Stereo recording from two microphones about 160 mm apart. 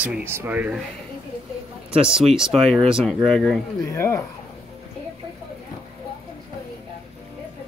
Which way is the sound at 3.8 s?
15° left (ahead or behind).